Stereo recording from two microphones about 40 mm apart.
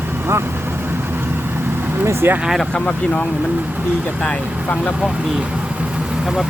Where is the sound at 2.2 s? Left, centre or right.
Right.